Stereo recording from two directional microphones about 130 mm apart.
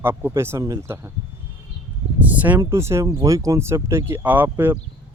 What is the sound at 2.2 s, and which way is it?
Speech, 10° right (ahead or behind).